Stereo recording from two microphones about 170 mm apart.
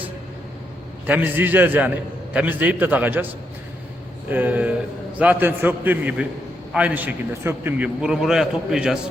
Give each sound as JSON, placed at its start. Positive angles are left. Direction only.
{"t": 1.0, "sound": "a man's voice", "side_deg": -10}
{"t": 4.3, "sound": "a man's voice", "side_deg": -10}